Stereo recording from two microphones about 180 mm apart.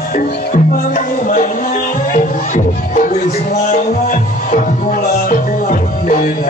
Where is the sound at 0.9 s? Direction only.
45° left (ahead or behind).